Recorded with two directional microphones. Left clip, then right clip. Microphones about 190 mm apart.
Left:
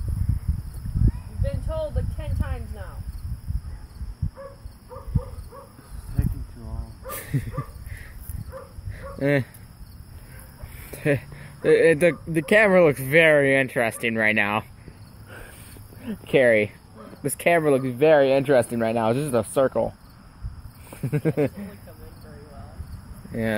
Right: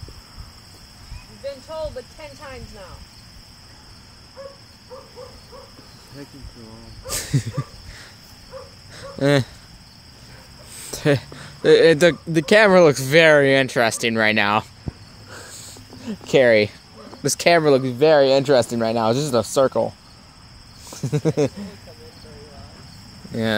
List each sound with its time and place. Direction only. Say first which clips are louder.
7.2 s dog: right 8 dB; 35° right (ahead or behind)
8.9 s a sound: right 4 dB; 30° right (ahead or behind)
10.8 s speech: right 4 dB; 30° right (ahead or behind)
16.0 s speech: right 3 dB; 25° right (ahead or behind)
20.9 s speech: right 3 dB; 25° right (ahead or behind)